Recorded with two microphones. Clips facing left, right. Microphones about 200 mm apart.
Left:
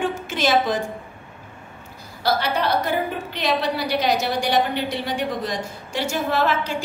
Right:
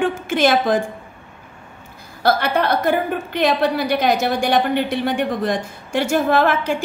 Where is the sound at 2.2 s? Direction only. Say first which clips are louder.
Right 4 dB; 55° right (ahead or behind).